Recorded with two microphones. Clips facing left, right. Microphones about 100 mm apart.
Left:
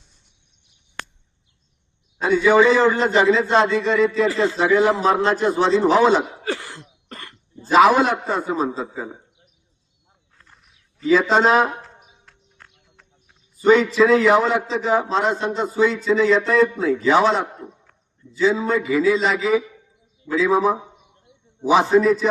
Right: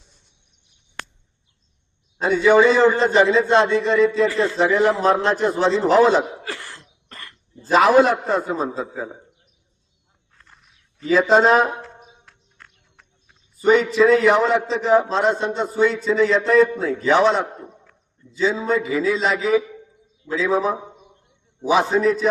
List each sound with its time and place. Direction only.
2.3 s a man's voice: centre (ahead or behind)
6.4 s throat clearing: 30° left (ahead or behind)
7.7 s a man's voice: centre (ahead or behind)
11.1 s a man's voice: centre (ahead or behind)
13.7 s a man's voice: centre (ahead or behind)
21.8 s a man's voice: centre (ahead or behind)